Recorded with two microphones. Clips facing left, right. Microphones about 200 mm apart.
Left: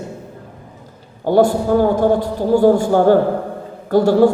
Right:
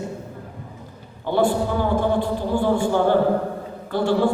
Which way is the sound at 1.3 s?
40° left (ahead or behind).